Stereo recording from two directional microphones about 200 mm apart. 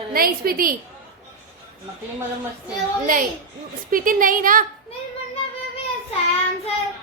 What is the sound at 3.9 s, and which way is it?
Speech, 45° right (ahead or behind).